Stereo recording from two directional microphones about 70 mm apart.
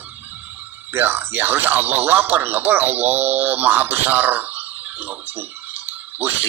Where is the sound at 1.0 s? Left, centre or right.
Right.